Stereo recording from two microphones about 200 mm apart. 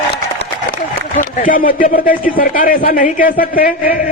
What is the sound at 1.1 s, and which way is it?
A man's voice, 40° left (ahead or behind).